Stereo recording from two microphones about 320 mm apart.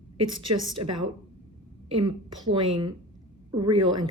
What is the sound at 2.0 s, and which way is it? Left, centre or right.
Speech, centre.